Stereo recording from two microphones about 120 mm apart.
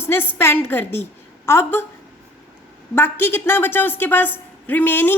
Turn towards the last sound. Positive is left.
turn(degrees=15)  # may be behind; listen again after turning